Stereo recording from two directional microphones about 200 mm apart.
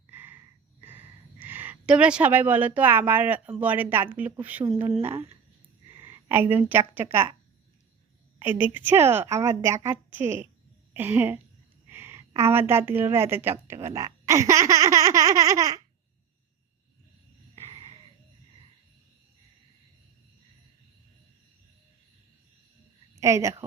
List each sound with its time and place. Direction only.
0.1 s a sound: 10° right (ahead or behind)
3.6 s a woman's voice: 10° right (ahead or behind)
5.9 s speech: 10° right (ahead or behind)
8.4 s a woman's voice: 10° right (ahead or behind)
17.5 s a sound: 25° right (ahead or behind)
23.2 s a woman's voice: 15° right (ahead or behind)